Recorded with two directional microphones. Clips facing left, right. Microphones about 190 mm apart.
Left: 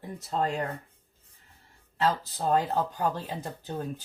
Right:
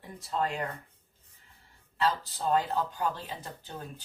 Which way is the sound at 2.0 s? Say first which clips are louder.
Left 2 dB; 45° left (ahead or behind).